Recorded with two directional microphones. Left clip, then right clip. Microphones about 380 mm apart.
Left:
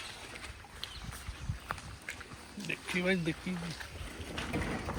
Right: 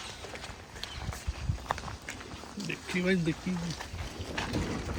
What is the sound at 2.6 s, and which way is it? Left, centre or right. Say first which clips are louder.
Speech: right 1 dB; centre.